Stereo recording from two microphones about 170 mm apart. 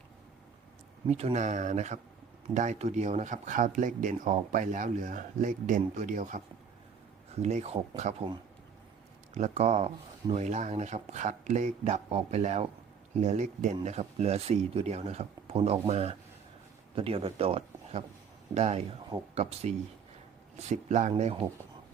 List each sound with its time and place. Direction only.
1.0 s speech: 40° right (ahead or behind)
7.4 s speech: 40° right (ahead or behind)
9.3 s speech: 40° right (ahead or behind)